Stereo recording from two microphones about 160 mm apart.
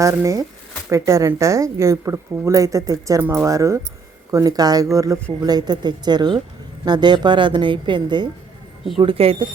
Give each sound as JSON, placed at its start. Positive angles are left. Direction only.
{"t": 0.0, "sound": "speech", "side_deg": -20}